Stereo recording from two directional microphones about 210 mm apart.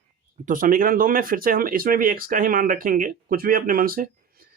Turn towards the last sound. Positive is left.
turn(degrees=-45)  # may be behind; listen again after turning